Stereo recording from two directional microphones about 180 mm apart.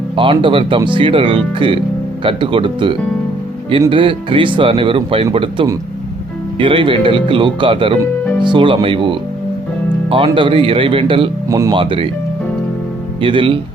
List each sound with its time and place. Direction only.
0.2 s speech: 30° right (ahead or behind)
11.4 s speech: 15° right (ahead or behind)
11.7 s speech: 30° right (ahead or behind)
13.2 s speech: 30° right (ahead or behind)